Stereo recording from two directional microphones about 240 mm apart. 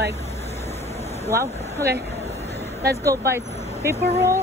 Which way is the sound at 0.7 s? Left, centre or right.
Left.